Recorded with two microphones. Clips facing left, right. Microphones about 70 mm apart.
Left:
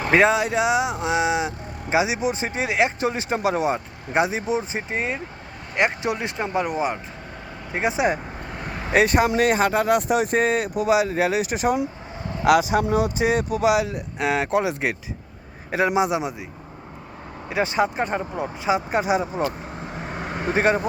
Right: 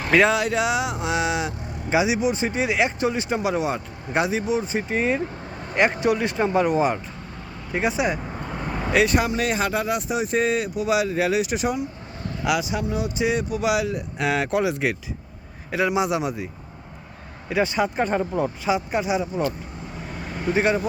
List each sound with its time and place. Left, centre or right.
0.0 s speech: left
5.7 s speech: centre
6.3 s speech: centre
7.7 s speech: left
8.4 s vehicle: centre
8.9 s speech: left
10.9 s speech: left
12.8 s speech: left
13.2 s speech: left
13.7 s speech: left
17.5 s speech: left
18.7 s speech: left
20.2 s speech: left